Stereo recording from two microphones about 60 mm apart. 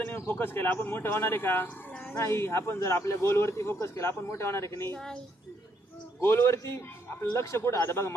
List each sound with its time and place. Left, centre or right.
0.0 s a man's voice: left
1.6 s dog: left
2.1 s speech: left
6.1 s speech: left